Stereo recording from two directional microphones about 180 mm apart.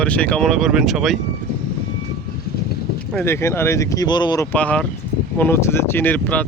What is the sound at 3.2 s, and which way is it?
Speech, 15° left (ahead or behind).